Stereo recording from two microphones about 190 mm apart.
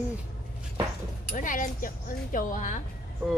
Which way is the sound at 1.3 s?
45° left (ahead or behind).